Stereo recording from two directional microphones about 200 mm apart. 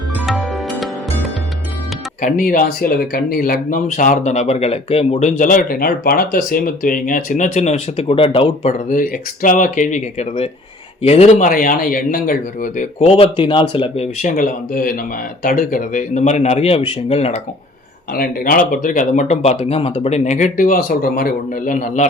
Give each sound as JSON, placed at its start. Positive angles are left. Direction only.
{"t": 0.3, "sound": "music", "side_deg": 0}
{"t": 2.2, "sound": "speech", "side_deg": 40}
{"t": 5.4, "sound": "speech", "side_deg": 40}
{"t": 8.9, "sound": "speech", "side_deg": 40}
{"t": 13.1, "sound": "speech", "side_deg": 25}
{"t": 18.1, "sound": "speech", "side_deg": 45}